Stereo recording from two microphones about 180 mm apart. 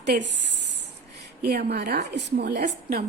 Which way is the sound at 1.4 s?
60° right (ahead or behind).